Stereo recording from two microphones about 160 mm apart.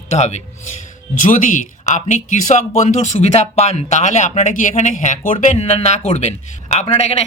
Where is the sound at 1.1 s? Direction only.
55° left (ahead or behind).